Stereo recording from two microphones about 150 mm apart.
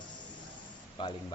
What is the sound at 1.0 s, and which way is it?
Speech, 35° left (ahead or behind).